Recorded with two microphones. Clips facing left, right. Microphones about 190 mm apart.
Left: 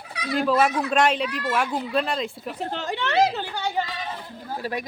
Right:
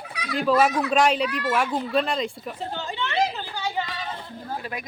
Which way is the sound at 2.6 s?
75° left (ahead or behind).